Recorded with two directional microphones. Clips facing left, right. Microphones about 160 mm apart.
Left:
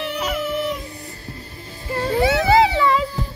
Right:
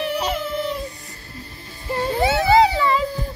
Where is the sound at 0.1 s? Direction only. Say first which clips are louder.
Even; 30° right (ahead or behind).